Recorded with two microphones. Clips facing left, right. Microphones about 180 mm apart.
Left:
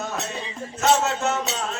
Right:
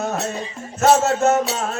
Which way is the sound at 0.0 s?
45° right (ahead or behind).